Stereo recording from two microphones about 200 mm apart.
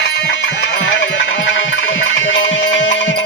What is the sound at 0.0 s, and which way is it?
Music, 65° left (ahead or behind).